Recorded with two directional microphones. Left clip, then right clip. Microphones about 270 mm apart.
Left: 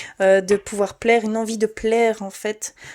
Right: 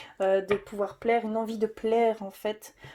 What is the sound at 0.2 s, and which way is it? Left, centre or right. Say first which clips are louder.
Speech: left 9 dB; left.